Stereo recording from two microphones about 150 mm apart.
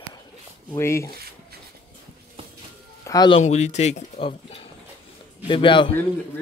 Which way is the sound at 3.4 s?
50° left (ahead or behind).